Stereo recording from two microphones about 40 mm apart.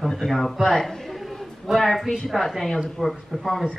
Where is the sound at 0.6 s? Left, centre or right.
Centre.